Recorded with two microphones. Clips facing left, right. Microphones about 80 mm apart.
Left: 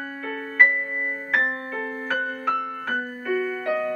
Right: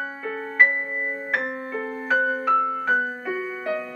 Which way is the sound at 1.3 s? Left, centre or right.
Centre.